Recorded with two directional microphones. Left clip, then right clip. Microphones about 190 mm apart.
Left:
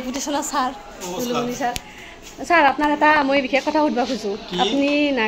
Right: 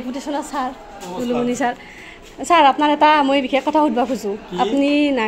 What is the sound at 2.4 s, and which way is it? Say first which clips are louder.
A woman's voice: right 3 dB; 35° right (ahead or behind).